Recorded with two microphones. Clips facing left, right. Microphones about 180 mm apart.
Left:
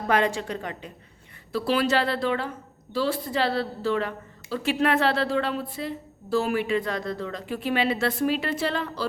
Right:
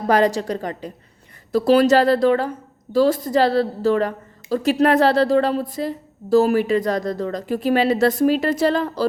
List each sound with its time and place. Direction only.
0.1 s a woman's voice: 40° right (ahead or behind)